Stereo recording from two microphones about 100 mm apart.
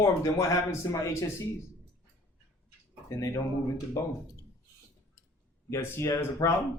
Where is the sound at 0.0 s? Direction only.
30° left (ahead or behind).